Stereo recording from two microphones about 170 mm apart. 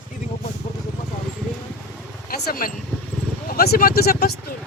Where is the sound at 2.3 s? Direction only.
60° left (ahead or behind).